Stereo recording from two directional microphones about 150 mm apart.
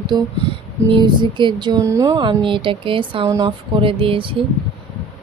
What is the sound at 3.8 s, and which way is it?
Speech, 35° right (ahead or behind).